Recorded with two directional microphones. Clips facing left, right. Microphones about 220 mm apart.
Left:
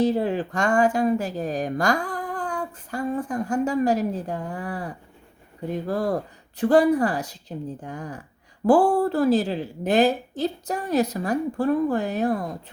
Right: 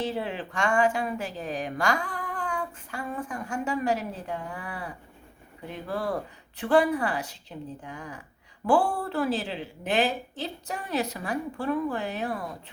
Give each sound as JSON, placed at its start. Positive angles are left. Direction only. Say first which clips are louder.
{"t": 0.0, "sound": "speech", "louder": "left 9 dB", "side_deg": 40}